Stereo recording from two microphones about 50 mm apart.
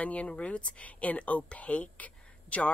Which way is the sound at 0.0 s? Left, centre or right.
Left.